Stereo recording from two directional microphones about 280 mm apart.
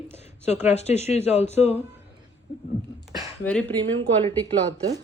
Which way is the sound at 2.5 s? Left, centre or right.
Left.